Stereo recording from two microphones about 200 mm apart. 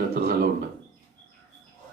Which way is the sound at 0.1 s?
50° right (ahead or behind).